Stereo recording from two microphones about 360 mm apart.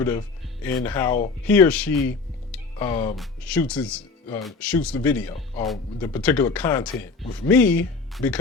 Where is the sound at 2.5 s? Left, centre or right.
Centre.